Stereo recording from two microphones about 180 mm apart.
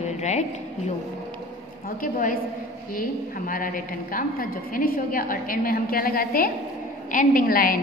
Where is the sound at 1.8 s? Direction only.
50° left (ahead or behind).